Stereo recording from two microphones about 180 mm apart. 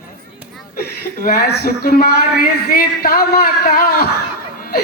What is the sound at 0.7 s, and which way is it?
Speech, 55° left (ahead or behind).